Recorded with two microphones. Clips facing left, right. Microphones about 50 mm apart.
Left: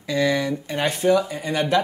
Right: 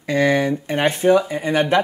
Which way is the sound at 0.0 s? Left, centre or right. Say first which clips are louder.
Right 4 dB; right.